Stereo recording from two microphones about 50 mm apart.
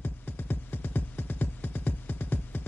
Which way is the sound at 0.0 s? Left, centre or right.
Left.